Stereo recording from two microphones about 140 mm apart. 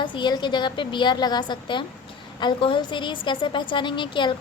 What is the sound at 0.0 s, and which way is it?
A woman's voice, 35° left (ahead or behind).